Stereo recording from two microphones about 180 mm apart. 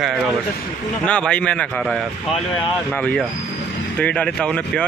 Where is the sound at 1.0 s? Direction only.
5° left (ahead or behind).